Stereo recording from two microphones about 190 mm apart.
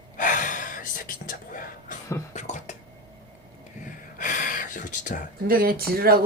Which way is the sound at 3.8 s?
45° left (ahead or behind).